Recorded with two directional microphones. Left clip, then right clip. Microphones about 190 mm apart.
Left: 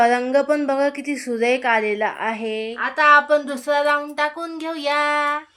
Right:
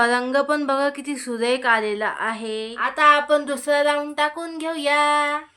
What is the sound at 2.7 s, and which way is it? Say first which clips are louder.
Speech: left 2 dB; 10° right (ahead or behind).